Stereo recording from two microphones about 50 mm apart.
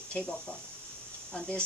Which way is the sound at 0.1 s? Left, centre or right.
Left.